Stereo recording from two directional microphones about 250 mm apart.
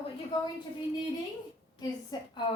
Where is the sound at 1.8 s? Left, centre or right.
Centre.